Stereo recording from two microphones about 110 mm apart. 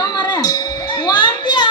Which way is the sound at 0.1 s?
40° left (ahead or behind).